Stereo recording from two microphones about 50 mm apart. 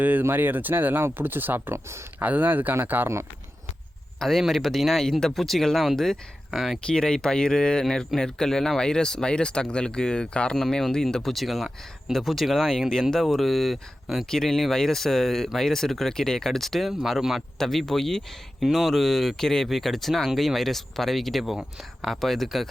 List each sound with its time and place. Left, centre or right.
0.0 s speech: right
1.7 s speech: right
2.1 s speech: right
4.2 s speech: centre
6.8 s speech: centre
10.6 s speech: centre
12.9 s speech: centre
17.0 s speech: centre
17.6 s speech: centre